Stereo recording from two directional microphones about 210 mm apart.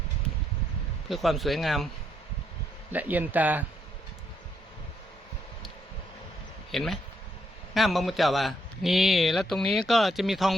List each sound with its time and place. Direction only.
1.0 s a man's voice: centre (ahead or behind)
2.9 s a man's voice: 10° right (ahead or behind)
6.7 s a man's voice: centre (ahead or behind)